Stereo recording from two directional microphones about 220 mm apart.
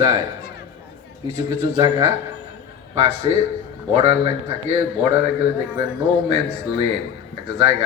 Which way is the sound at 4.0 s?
25° right (ahead or behind).